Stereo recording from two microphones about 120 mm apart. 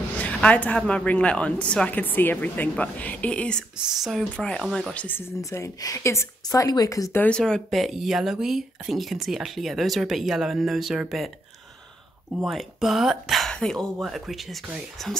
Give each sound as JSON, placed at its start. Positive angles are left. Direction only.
{"t": 0.2, "sound": "speech", "side_deg": 10}
{"t": 3.7, "sound": "speech", "side_deg": -5}
{"t": 5.4, "sound": "speech", "side_deg": 25}
{"t": 7.2, "sound": "speech", "side_deg": 10}
{"t": 12.4, "sound": "speech", "side_deg": 0}